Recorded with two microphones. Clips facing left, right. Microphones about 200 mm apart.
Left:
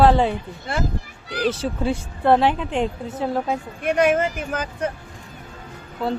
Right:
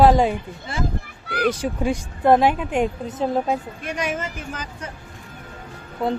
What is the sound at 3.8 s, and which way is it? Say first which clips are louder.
Speech: left 8 dB; 55° left (ahead or behind).